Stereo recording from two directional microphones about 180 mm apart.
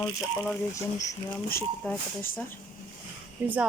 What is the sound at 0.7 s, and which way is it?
Speech, 20° left (ahead or behind).